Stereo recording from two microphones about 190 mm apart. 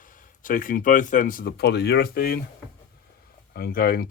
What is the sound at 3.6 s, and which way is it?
Speech, 50° left (ahead or behind).